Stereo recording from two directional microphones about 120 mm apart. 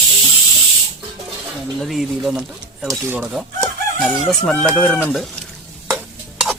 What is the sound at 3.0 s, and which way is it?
Chicken, 15° right (ahead or behind).